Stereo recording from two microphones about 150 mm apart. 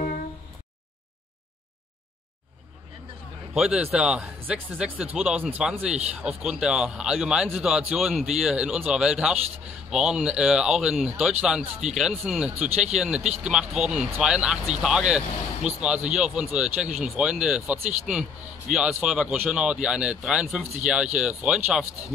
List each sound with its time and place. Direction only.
3.5 s speech: 5° right (ahead or behind)